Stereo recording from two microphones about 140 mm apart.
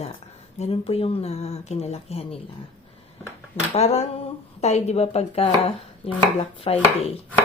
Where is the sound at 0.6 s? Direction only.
45° left (ahead or behind).